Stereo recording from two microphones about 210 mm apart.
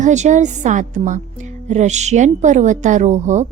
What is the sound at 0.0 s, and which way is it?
A woman's voice, 35° right (ahead or behind).